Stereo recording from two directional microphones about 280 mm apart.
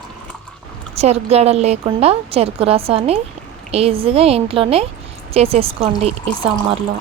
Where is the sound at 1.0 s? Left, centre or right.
Right.